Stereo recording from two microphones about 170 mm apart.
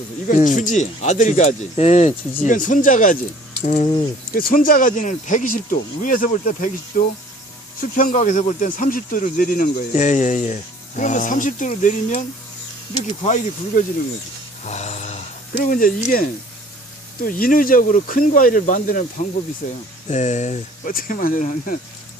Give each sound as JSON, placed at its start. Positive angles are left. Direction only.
{"t": 0.3, "sound": "speech", "side_deg": 50}
{"t": 3.6, "sound": "speech", "side_deg": 35}
{"t": 4.4, "sound": "speech", "side_deg": 60}
{"t": 13.2, "sound": "speech", "side_deg": 45}
{"t": 14.6, "sound": "a sound", "side_deg": 40}
{"t": 15.6, "sound": "speech", "side_deg": 55}
{"t": 17.2, "sound": "speech", "side_deg": 55}